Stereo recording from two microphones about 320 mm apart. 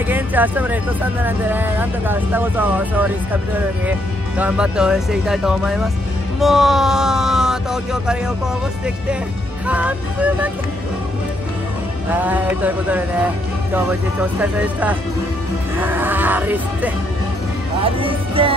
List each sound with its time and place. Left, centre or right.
0.1 s music: centre
1.2 s speech: centre
4.4 s speech: centre
9.7 s speech: centre
12.1 s speech: centre
14.4 s speech: centre
17.8 s speech: centre